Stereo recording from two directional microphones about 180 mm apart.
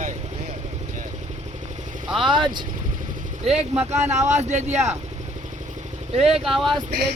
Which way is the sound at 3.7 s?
40° right (ahead or behind).